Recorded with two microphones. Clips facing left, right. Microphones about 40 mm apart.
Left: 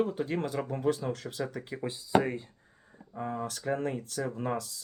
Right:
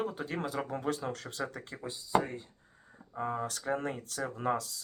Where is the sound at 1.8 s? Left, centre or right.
Left.